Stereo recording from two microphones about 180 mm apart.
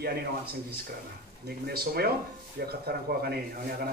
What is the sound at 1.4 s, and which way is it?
A man's voice, 60° right (ahead or behind).